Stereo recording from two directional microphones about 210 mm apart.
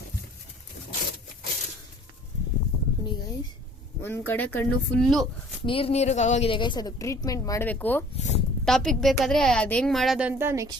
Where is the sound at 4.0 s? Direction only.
10° left (ahead or behind).